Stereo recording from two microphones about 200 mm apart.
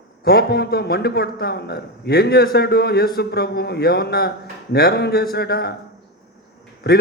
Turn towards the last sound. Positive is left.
turn(degrees=55)  # may be behind; listen again after turning